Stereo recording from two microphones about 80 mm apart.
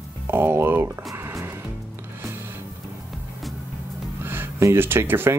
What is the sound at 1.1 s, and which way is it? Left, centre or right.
Music, right.